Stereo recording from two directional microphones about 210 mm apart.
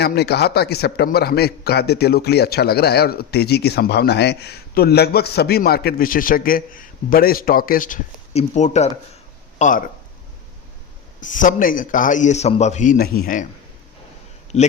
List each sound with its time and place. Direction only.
0.0 s a man's voice: 50° left (ahead or behind)
11.2 s a man's voice: 40° left (ahead or behind)
14.5 s a man's voice: 30° left (ahead or behind)